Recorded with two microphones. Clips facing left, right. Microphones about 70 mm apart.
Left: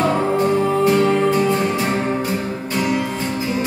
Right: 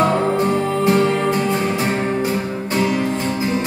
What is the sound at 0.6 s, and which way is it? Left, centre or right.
Music, centre.